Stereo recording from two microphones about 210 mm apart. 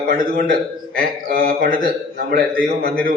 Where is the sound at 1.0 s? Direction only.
45° right (ahead or behind).